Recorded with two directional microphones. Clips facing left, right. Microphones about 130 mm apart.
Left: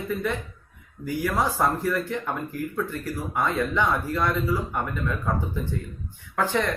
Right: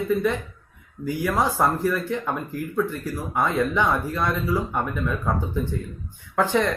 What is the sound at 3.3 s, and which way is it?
Speech, 15° right (ahead or behind).